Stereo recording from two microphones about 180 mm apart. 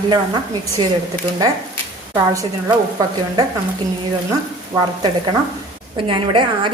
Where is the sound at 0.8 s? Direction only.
25° right (ahead or behind).